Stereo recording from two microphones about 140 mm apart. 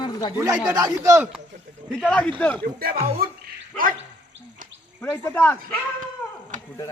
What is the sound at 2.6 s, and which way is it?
Speech, 90° right.